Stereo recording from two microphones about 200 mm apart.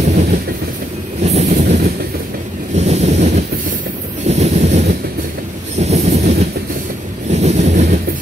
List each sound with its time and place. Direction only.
0.0 s train: 40° right (ahead or behind)
2.7 s boat: 35° right (ahead or behind)
4.3 s train: 35° right (ahead or behind)